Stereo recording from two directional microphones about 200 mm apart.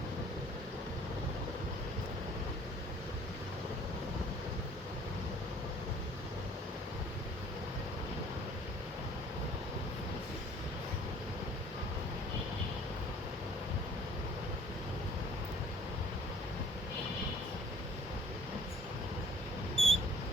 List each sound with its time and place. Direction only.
19.7 s mouse: 30° right (ahead or behind)